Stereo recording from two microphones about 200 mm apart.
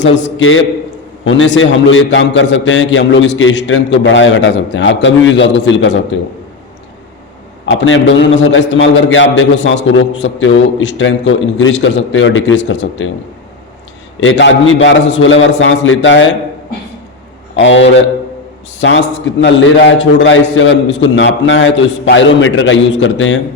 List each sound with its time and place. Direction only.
0.2 s a man's voice: 75° left (ahead or behind)
7.6 s a man's voice: 75° left (ahead or behind)
14.2 s a man's voice: 70° left (ahead or behind)
17.6 s a man's voice: 65° left (ahead or behind)